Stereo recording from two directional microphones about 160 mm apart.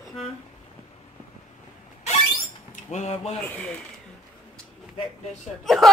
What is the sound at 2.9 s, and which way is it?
Speech, 45° left (ahead or behind).